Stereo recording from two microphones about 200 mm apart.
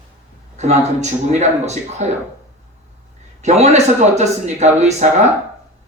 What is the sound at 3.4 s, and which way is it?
A man's voice, 35° right (ahead or behind).